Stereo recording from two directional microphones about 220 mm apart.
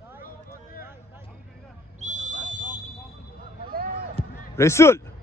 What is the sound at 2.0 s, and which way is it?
Whistle, 35° right (ahead or behind).